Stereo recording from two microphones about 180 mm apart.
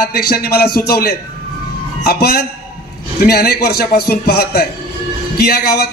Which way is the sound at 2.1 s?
60° left (ahead or behind).